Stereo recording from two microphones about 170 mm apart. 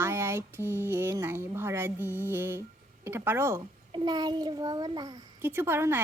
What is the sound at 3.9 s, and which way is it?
A child's voice, 25° right (ahead or behind).